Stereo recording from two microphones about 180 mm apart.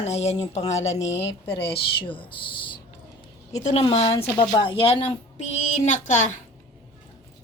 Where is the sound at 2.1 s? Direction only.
30° left (ahead or behind).